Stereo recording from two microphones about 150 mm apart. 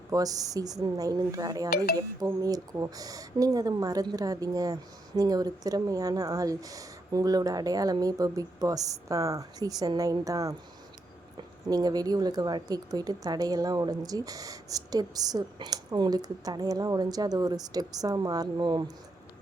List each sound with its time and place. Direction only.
0.1 s speech: 25° right (ahead or behind)